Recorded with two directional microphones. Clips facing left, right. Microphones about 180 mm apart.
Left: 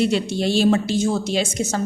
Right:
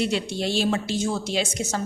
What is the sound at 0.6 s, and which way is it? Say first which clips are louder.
A woman's voice: left 8 dB; 45° left (ahead or behind).